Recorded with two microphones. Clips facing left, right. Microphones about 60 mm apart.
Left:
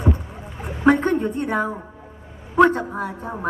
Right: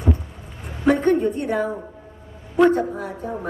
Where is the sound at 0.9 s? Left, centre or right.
Left.